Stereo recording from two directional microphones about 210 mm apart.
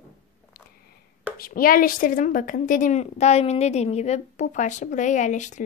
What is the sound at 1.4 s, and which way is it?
A woman's voice, 45° left (ahead or behind).